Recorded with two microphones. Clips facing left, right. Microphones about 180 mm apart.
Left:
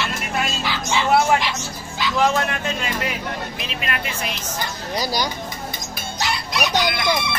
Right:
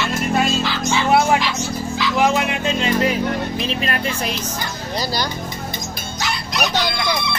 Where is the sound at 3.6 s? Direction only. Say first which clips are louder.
Right 6 dB; 35° right (ahead or behind).